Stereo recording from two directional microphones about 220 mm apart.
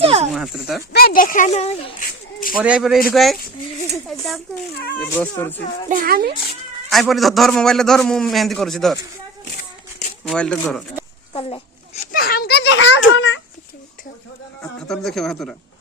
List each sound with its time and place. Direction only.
0.0 s a sound: 25° right (ahead or behind)
0.3 s speech: centre (ahead or behind)
0.9 s speech: 40° left (ahead or behind)
1.5 s speech: 25° left (ahead or behind)
2.5 s a man's voice: 5° right (ahead or behind)
4.0 s a sound: centre (ahead or behind)
4.9 s speech: 10° left (ahead or behind)
5.9 s a child's voice: 40° right (ahead or behind)
6.9 s a man's voice: centre (ahead or behind)
10.2 s a man's voice: 5° left (ahead or behind)
11.3 s speech: 25° left (ahead or behind)
12.1 s a child's voice: 45° left (ahead or behind); by 13.4 s 60° left (ahead or behind)
14.8 s a man's voice: centre (ahead or behind)